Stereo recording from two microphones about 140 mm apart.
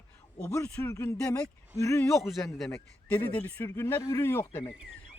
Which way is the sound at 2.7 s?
15° left (ahead or behind).